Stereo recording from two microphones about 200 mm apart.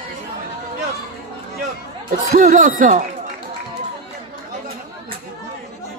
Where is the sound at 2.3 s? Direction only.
40° right (ahead or behind).